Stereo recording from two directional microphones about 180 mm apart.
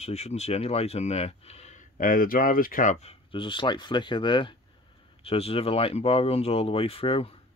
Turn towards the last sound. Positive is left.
turn(degrees=30)  # may be behind; listen again after turning